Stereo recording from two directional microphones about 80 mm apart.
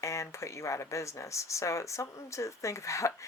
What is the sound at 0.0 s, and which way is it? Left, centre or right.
Speech, left.